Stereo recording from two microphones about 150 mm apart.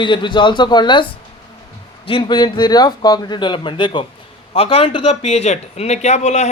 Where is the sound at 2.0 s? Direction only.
35° left (ahead or behind).